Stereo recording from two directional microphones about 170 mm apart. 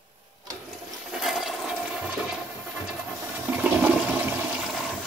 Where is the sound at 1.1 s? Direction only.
Centre (ahead or behind).